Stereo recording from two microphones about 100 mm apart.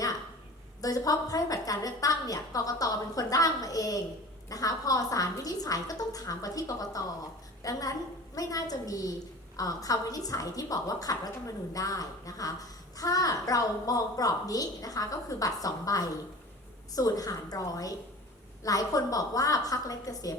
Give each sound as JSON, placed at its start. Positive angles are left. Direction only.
{"t": 0.8, "sound": "a child's voice", "side_deg": 35}